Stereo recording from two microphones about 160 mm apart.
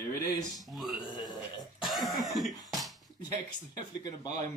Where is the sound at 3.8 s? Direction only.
25° left (ahead or behind).